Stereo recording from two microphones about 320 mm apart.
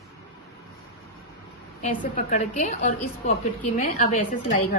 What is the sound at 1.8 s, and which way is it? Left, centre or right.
A woman's voice, left.